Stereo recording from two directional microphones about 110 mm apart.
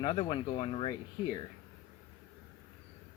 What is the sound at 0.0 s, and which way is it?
Speech, 50° left (ahead or behind).